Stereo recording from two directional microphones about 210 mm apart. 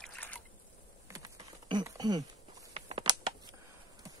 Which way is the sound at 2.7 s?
25° right (ahead or behind).